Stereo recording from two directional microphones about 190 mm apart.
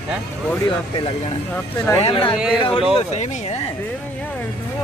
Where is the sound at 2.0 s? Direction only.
30° left (ahead or behind).